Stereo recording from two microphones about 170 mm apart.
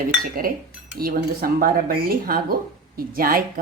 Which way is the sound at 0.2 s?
60° right (ahead or behind).